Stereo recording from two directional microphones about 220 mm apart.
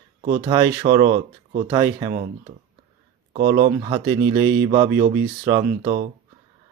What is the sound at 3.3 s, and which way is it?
Speech, 20° right (ahead or behind).